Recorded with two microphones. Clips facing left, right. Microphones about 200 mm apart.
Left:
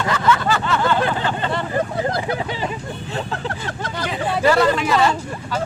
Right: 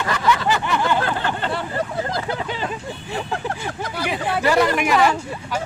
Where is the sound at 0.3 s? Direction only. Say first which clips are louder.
Even; 15° right (ahead or behind).